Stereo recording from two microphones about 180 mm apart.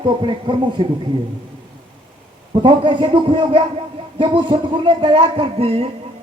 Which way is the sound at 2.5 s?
30° right (ahead or behind).